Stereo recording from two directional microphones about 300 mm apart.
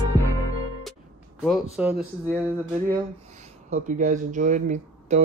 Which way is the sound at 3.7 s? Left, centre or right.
Right.